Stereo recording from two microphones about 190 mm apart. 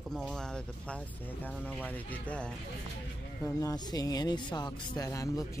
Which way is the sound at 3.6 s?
20° left (ahead or behind).